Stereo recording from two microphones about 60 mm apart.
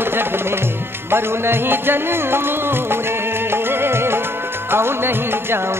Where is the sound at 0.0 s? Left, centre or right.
Right.